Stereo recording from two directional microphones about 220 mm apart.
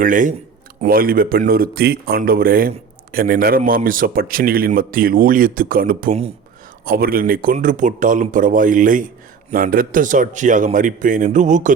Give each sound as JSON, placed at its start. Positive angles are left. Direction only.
{"t": 0.0, "sound": "speech", "side_deg": -35}